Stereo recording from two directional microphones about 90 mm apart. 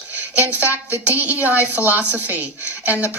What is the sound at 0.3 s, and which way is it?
A woman's voice, 20° right (ahead or behind).